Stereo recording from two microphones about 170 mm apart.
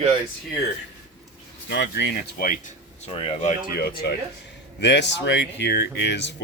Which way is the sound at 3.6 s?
60° left (ahead or behind).